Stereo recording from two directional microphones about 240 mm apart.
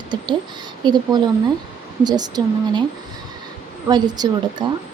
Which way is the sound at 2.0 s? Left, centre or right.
Centre.